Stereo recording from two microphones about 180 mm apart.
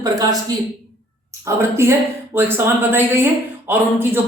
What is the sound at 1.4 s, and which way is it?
A man's voice, 15° right (ahead or behind).